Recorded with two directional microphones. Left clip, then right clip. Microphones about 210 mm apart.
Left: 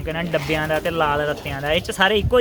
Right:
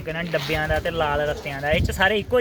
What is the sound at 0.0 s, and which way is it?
A man's voice, 5° left (ahead or behind).